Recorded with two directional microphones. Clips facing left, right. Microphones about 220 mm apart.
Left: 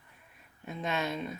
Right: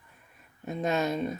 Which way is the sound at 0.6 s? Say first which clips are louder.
Right 6 dB; 45° right (ahead or behind).